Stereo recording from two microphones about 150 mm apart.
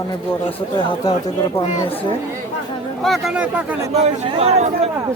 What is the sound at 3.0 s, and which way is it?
Speech, centre (ahead or behind).